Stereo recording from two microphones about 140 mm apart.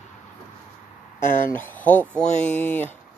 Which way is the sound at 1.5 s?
15° left (ahead or behind).